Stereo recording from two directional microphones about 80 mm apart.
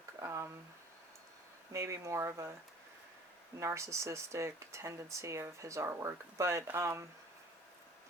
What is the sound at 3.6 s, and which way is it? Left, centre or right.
Speech, right.